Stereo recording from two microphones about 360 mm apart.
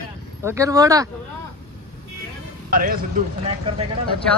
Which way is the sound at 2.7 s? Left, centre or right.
Right.